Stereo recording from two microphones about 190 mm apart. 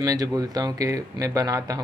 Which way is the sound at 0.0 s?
20° right (ahead or behind).